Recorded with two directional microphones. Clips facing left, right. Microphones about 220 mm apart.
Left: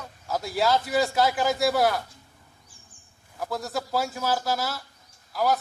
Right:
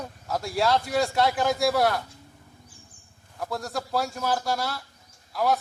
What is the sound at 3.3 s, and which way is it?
A man's voice, centre (ahead or behind).